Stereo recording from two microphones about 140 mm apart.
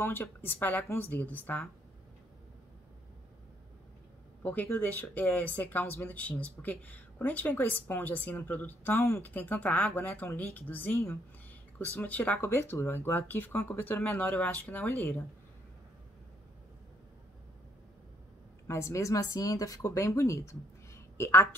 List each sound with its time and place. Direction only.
0.0 s speech: 15° left (ahead or behind)
4.4 s speech: 15° left (ahead or behind)
18.7 s speech: 20° left (ahead or behind)